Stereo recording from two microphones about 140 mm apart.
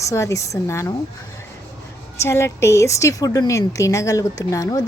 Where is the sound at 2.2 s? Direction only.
20° left (ahead or behind).